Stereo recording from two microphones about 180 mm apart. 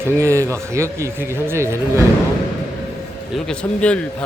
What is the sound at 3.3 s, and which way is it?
Speech, 5° left (ahead or behind).